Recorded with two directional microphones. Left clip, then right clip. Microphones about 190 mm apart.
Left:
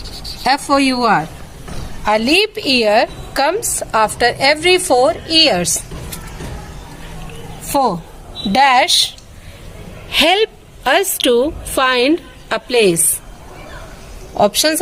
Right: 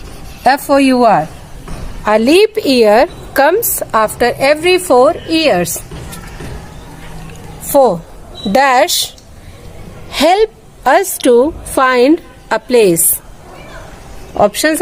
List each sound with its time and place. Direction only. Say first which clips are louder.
0.7 s a woman's voice: right 4 dB; 55° right (ahead or behind)
7.6 s a sound: right 6 dB; 55° right (ahead or behind)
8.5 s a woman's voice: right 1 dB; 45° right (ahead or behind)
10.1 s a woman's voice: right 3 dB; 30° right (ahead or behind); by 13.0 s 55° right (ahead or behind)
14.3 s a woman's voice: right 2 dB; 45° right (ahead or behind)